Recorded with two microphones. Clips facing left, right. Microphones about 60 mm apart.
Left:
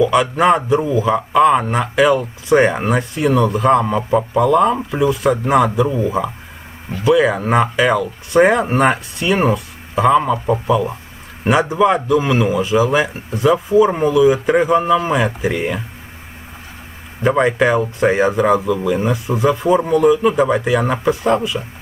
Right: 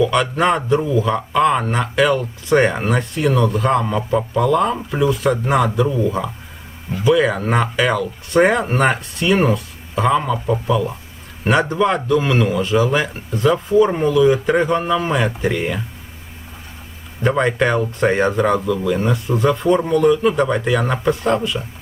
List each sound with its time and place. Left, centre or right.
0.0 s speech: centre
10.2 s a man's voice: centre
10.7 s speech: centre
17.2 s speech: centre